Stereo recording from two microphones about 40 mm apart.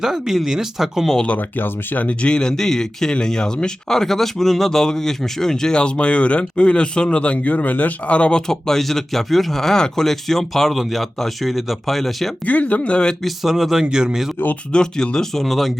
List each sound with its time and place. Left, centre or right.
0.0 s speech: centre
1.4 s speech: left
2.0 s speech: left
3.9 s speech: centre; by 7.3 s left
7.4 s speech: left
8.1 s speech: left
8.4 s speech: centre
12.5 s speech: left
13.2 s speech: centre
13.9 s speech: centre
14.7 s speech: left; by 15.7 s centre